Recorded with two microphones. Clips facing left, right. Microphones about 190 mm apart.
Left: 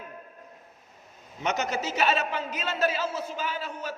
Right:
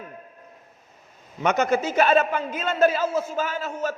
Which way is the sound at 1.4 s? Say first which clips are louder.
Right 7 dB; 55° right (ahead or behind).